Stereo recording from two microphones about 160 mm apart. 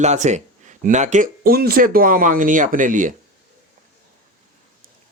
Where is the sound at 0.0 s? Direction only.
45° right (ahead or behind).